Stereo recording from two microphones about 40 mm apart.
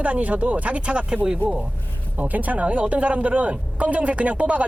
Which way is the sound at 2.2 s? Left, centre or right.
Right.